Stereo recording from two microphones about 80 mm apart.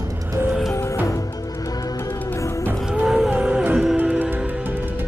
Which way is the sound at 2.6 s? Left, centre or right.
Centre.